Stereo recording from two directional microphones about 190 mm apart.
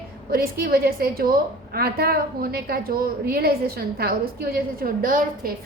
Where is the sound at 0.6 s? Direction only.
50° right (ahead or behind).